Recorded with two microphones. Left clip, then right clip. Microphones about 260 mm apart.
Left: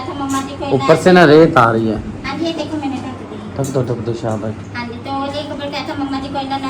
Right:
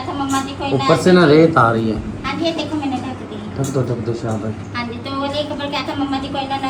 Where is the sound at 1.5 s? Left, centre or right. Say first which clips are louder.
Left 2 dB; left.